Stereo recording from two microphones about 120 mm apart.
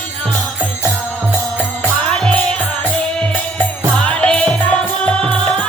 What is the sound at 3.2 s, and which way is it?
Music, 10° left (ahead or behind).